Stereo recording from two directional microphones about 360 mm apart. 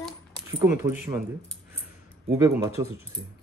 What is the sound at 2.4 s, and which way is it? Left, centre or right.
Speech, centre.